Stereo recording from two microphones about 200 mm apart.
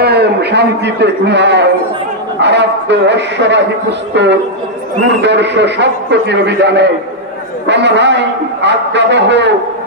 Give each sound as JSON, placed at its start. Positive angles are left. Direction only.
{"t": 0.0, "sound": "a man's voice", "side_deg": -55}